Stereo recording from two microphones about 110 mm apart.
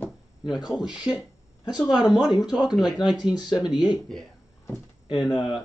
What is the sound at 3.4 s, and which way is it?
Speech, 40° left (ahead or behind).